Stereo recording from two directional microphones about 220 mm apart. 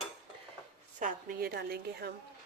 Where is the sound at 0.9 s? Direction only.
40° right (ahead or behind).